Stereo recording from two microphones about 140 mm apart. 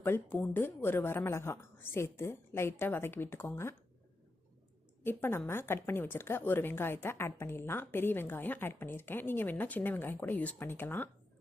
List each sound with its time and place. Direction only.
0.0 s a woman's voice: 15° left (ahead or behind)
5.0 s a woman's voice: 15° left (ahead or behind)